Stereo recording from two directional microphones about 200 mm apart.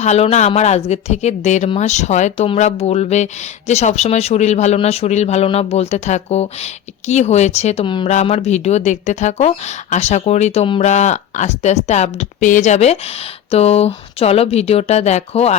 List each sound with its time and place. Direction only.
0.0 s speech: 35° left (ahead or behind)